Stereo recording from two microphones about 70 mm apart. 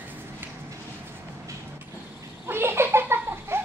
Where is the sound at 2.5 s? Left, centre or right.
Right.